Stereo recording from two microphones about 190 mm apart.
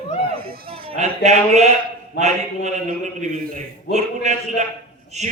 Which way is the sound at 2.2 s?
65° left (ahead or behind).